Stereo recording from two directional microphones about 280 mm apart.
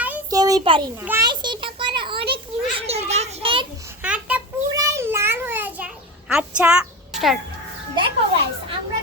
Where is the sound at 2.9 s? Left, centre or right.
Right.